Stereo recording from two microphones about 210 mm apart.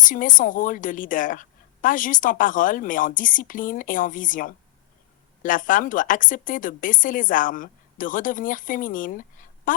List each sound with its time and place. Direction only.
0.0 s a woman's voice: 40° left (ahead or behind)